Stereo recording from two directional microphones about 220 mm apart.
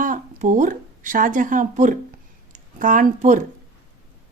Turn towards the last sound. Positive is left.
turn(degrees=-35)  # may be behind; listen again after turning